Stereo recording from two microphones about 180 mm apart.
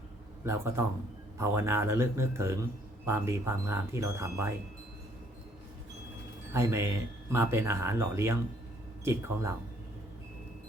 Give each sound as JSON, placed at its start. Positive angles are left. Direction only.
{"t": 0.4, "sound": "speech", "side_deg": -15}
{"t": 6.5, "sound": "speech", "side_deg": -15}